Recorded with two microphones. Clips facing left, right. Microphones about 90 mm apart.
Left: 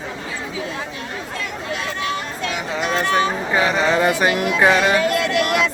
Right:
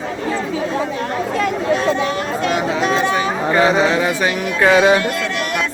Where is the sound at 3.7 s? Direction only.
Centre (ahead or behind).